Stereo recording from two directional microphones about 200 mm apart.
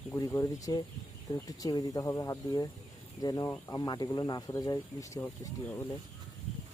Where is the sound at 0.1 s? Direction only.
10° left (ahead or behind).